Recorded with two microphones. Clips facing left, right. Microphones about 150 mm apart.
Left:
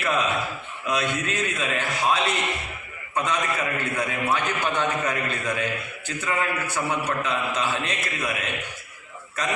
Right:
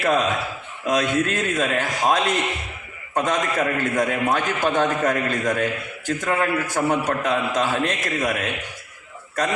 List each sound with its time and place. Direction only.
0.0 s a man's voice: 40° right (ahead or behind)